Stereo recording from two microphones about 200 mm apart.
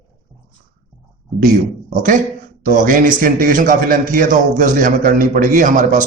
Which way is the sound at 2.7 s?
40° right (ahead or behind).